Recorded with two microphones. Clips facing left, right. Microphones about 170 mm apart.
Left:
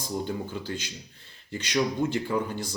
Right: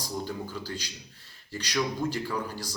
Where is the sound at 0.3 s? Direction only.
20° left (ahead or behind).